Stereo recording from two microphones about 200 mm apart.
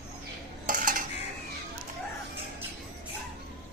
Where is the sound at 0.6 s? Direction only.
45° right (ahead or behind).